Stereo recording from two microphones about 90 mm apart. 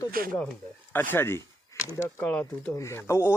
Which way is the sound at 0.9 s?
25° left (ahead or behind).